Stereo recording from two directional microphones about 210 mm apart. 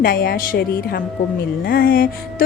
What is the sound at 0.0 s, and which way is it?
Speech, 45° left (ahead or behind).